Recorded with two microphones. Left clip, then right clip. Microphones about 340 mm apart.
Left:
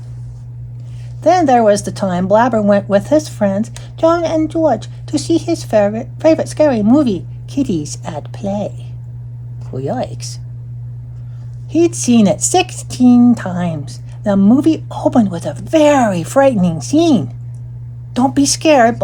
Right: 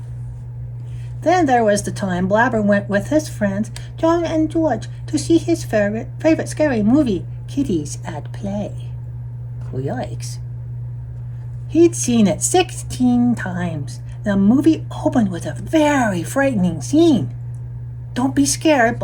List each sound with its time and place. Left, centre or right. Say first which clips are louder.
1.2 s speech: left 5 dB; left
9.7 s speech: left 6 dB; left
11.7 s speech: left 2 dB; left